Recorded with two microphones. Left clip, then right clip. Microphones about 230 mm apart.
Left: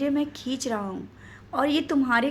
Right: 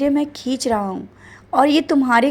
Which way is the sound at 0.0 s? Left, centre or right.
Right.